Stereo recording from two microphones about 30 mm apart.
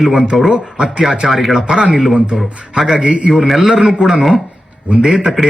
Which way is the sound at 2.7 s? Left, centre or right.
Right.